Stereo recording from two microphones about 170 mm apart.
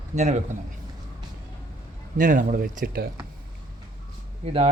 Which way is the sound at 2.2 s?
50° right (ahead or behind).